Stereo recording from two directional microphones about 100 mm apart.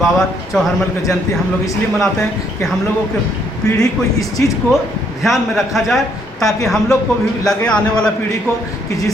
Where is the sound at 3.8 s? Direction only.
35° left (ahead or behind).